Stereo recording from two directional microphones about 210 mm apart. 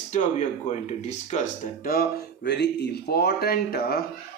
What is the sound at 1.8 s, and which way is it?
Speech, 45° left (ahead or behind).